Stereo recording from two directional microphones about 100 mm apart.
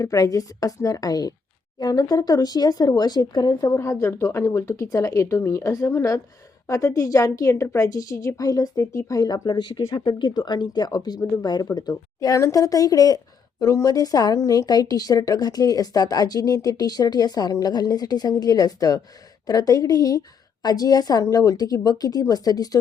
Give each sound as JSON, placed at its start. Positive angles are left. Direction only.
{"t": 0.0, "sound": "speech", "side_deg": 35}
{"t": 3.7, "sound": "speech", "side_deg": 30}